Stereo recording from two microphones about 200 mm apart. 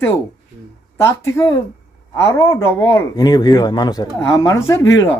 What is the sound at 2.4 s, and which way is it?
Speech, 15° left (ahead or behind).